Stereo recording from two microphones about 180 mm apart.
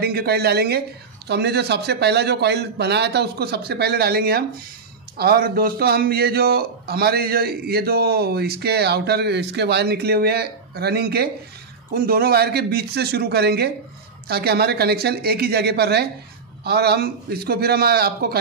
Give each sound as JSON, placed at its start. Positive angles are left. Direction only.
{"t": 0.0, "sound": "a man's voice", "side_deg": -60}